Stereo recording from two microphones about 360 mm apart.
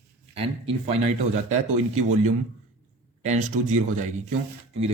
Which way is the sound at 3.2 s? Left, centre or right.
Centre.